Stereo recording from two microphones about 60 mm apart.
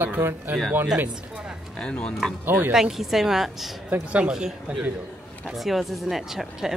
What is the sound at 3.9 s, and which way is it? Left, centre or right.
Speech, right.